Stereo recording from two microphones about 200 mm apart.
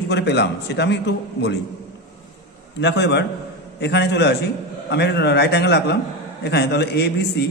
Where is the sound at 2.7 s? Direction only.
60° left (ahead or behind).